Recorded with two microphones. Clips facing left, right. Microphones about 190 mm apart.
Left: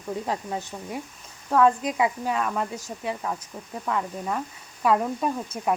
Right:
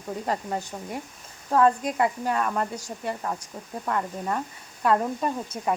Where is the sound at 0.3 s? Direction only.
Centre (ahead or behind).